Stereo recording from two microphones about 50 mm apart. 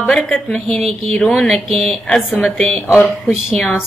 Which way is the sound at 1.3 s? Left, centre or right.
Centre.